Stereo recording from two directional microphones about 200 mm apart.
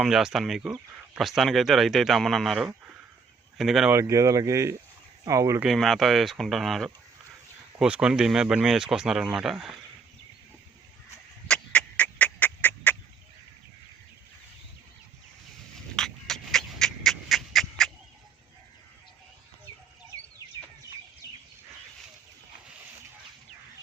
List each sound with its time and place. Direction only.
0.0 s speech: centre (ahead or behind)
3.9 s speech: 15° right (ahead or behind)
5.6 s speech: centre (ahead or behind)
11.4 s a sound: 5° left (ahead or behind)
16.0 s dog: centre (ahead or behind)